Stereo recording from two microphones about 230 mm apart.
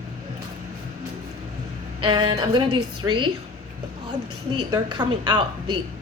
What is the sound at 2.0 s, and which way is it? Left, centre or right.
Speech, right.